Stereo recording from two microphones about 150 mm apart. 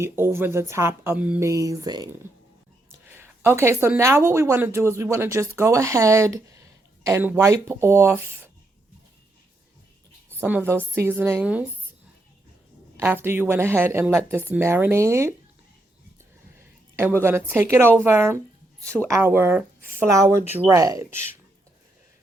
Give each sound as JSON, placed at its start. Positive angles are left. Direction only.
{"t": 0.0, "sound": "a woman's voice", "side_deg": -15}
{"t": 10.3, "sound": "a woman's voice", "side_deg": -15}
{"t": 13.2, "sound": "a woman's voice", "side_deg": -15}
{"t": 17.0, "sound": "a woman's voice", "side_deg": -15}